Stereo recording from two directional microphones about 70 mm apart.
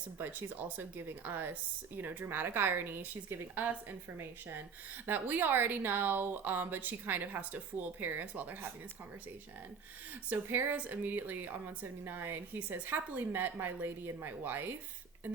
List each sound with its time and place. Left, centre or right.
0.2 s a woman's voice: right
10.2 s a woman's voice: right